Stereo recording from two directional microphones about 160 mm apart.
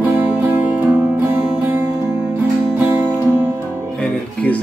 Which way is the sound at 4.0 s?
5° left (ahead or behind).